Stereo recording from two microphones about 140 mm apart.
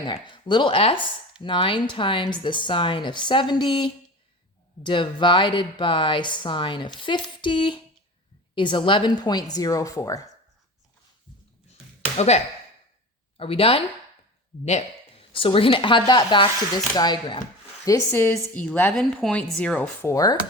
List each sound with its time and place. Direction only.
0.0 s a woman's voice: 35° left (ahead or behind)
12.1 s speech: 50° left (ahead or behind)
15.3 s speech: 40° left (ahead or behind)
17.8 s a woman's voice: 20° left (ahead or behind)